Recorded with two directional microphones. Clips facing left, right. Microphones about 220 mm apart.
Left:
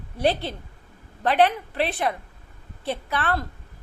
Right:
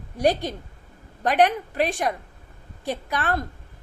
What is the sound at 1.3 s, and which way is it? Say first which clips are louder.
A woman's voice: even; 45° right (ahead or behind).